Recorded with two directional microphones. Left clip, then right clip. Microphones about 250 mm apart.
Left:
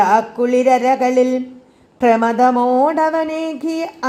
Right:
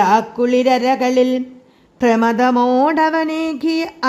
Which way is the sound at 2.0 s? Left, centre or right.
Right.